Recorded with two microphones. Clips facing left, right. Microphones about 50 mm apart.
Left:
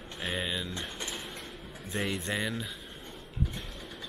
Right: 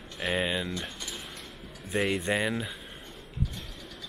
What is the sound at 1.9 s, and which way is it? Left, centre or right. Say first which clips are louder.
Speech: right 5 dB; centre.